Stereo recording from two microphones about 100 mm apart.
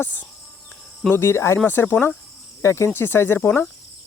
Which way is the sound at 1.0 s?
25° left (ahead or behind).